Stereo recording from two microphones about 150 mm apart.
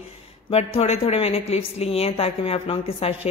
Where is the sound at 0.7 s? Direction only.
40° left (ahead or behind).